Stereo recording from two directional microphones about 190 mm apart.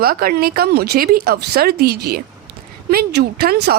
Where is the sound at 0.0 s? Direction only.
50° right (ahead or behind).